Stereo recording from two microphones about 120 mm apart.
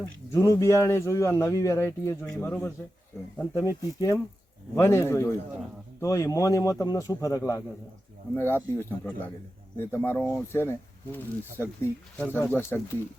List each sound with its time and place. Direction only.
0.0 s speech: 25° left (ahead or behind)